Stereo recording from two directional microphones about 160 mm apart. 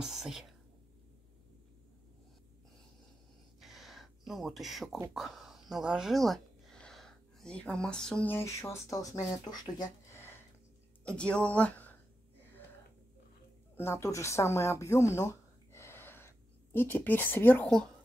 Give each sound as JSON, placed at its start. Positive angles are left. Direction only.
{"t": 0.0, "sound": "whispering", "side_deg": 0}
{"t": 3.6, "sound": "a sound", "side_deg": 0}
{"t": 5.1, "sound": "speech", "side_deg": 0}
{"t": 11.1, "sound": "speech", "side_deg": 5}
{"t": 13.7, "sound": "speech", "side_deg": 15}